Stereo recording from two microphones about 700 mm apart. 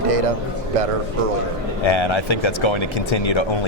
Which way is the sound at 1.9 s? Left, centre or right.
Left.